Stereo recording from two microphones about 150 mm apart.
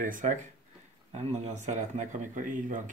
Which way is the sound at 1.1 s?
50° right (ahead or behind).